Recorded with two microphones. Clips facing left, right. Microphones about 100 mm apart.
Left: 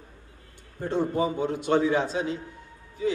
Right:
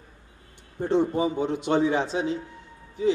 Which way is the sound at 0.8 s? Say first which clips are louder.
Right 2 dB; 20° right (ahead or behind).